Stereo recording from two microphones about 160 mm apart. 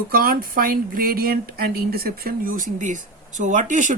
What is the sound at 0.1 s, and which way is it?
Speech, 65° right (ahead or behind).